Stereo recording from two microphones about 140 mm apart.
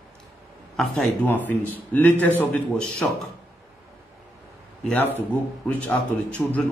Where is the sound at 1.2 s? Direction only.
15° left (ahead or behind).